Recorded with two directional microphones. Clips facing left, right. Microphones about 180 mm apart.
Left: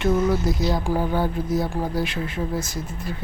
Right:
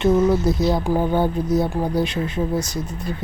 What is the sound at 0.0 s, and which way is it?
Speech, 20° right (ahead or behind).